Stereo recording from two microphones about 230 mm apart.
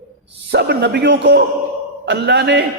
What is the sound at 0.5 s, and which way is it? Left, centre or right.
A man's voice, right.